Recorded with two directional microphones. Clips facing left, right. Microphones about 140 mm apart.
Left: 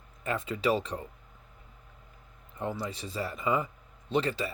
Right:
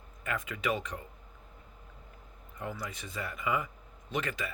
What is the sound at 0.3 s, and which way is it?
Speech, 30° left (ahead or behind).